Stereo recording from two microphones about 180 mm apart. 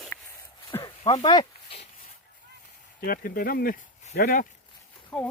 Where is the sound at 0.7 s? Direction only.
25° left (ahead or behind).